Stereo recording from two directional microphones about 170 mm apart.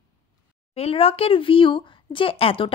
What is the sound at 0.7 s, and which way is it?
A woman's voice, 35° left (ahead or behind).